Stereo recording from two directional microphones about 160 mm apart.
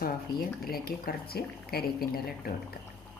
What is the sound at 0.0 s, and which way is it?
Speech, 70° left (ahead or behind).